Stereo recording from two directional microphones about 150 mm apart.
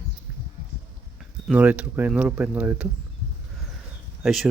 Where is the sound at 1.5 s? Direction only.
10° right (ahead or behind).